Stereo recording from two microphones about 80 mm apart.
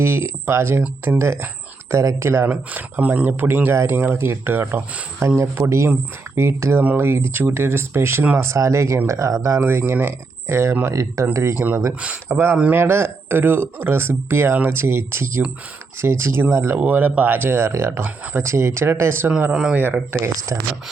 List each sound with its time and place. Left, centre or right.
0.0 s speech: right
2.5 s speech: right
9.6 s speech: right
11.5 s speech: right
19.7 s speech: centre
20.5 s speech: right